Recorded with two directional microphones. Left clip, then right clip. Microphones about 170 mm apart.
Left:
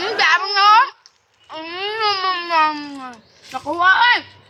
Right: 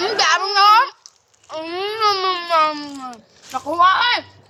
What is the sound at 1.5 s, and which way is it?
Baby cry, 80° right.